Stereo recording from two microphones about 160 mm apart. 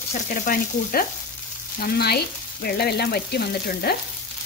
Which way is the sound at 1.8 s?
80° left.